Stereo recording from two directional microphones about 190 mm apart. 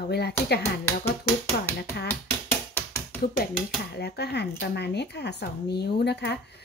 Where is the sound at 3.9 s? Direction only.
60° left (ahead or behind).